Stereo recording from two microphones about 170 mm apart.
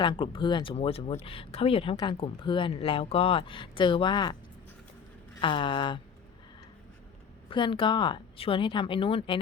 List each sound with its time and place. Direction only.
0.0 s speech: 30° left (ahead or behind)
5.4 s a woman's voice: 30° left (ahead or behind)
7.5 s a woman's voice: 30° left (ahead or behind)